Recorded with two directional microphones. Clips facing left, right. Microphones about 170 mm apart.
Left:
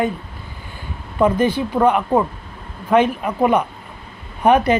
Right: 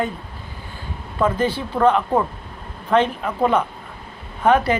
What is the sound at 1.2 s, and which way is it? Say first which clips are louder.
A woman's voice: left 4 dB; 15° left (ahead or behind).